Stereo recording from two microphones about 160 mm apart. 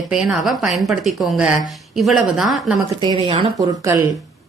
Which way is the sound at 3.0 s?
30° right (ahead or behind).